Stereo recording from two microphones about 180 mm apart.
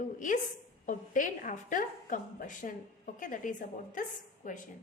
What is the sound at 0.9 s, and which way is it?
A woman's voice, 45° left (ahead or behind).